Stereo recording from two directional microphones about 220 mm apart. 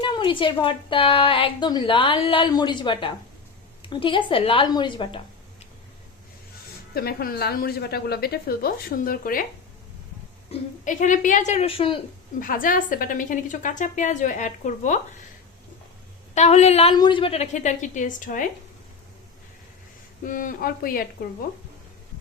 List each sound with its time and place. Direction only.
0.0 s a woman's voice: 20° left (ahead or behind)
6.9 s a woman's voice: 45° left (ahead or behind)
10.5 s a woman's voice: 35° left (ahead or behind)
12.4 s a woman's voice: 40° left (ahead or behind)
16.3 s a woman's voice: 30° left (ahead or behind)
20.2 s a woman's voice: 35° left (ahead or behind)